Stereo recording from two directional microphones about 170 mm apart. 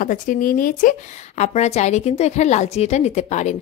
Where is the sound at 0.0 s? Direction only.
50° left (ahead or behind).